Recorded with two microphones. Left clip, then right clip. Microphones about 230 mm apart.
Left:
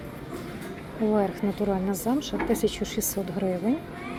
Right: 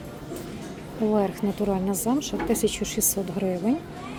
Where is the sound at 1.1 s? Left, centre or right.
Centre.